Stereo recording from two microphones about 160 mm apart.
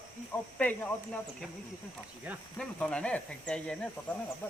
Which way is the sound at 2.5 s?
5° left (ahead or behind).